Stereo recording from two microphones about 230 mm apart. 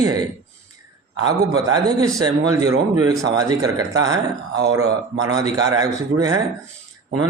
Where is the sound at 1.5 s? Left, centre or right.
Centre.